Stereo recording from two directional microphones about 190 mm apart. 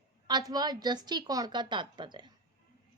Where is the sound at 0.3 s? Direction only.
20° right (ahead or behind).